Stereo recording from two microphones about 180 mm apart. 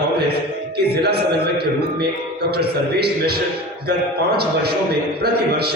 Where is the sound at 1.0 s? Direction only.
65° right (ahead or behind).